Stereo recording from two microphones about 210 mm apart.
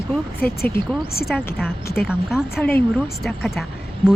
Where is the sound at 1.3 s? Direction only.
10° left (ahead or behind).